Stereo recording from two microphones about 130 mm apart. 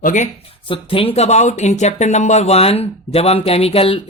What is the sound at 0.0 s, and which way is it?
Speech, 90° left.